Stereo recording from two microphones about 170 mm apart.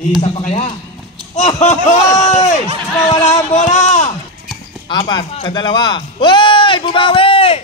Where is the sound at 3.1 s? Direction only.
40° left (ahead or behind).